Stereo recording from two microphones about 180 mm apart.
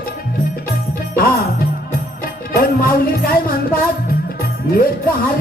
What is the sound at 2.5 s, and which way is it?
Music, 55° left (ahead or behind).